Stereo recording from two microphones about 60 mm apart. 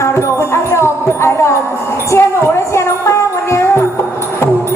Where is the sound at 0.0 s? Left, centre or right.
Left.